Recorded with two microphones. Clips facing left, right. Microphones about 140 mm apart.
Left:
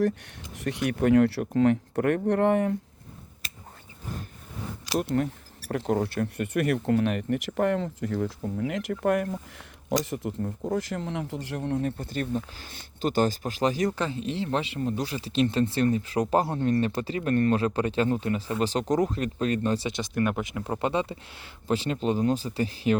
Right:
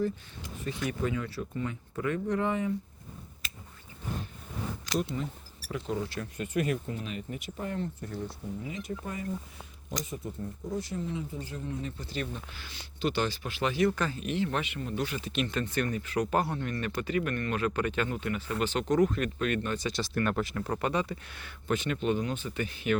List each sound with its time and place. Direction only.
0.5 s speech: 75° left (ahead or behind)
4.9 s speech: 65° left (ahead or behind)
9.9 s speech: 80° left; by 14.0 s 40° left (ahead or behind)
14.0 s speech: 25° left (ahead or behind)
20.0 s speech: 15° left (ahead or behind); by 23.0 s 30° left (ahead or behind)